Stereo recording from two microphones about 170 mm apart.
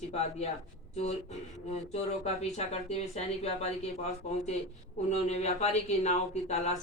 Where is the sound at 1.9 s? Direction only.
40° left (ahead or behind).